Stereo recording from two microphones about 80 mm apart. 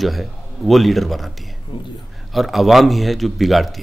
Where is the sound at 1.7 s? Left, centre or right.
Left.